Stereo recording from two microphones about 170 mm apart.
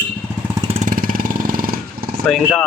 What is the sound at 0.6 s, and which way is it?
Vehicle, 30° right (ahead or behind).